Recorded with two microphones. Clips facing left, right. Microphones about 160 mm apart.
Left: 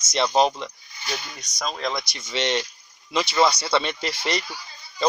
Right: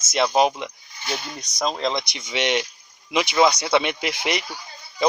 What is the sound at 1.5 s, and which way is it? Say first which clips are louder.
Speech: right 4 dB; 25° right (ahead or behind).